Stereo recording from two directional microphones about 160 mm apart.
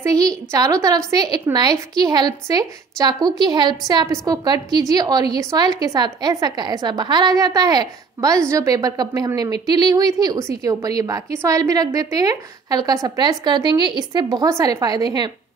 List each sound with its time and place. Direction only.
0.0 s a woman's voice: 20° right (ahead or behind)